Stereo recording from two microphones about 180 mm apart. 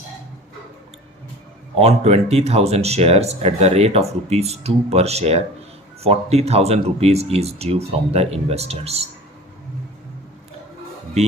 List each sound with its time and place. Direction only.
1.8 s speech: 35° right (ahead or behind)